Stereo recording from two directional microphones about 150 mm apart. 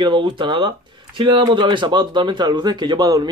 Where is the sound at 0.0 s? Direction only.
30° right (ahead or behind).